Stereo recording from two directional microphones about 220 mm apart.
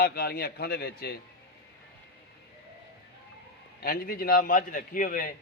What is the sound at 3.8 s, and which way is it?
A man's voice, 40° left (ahead or behind).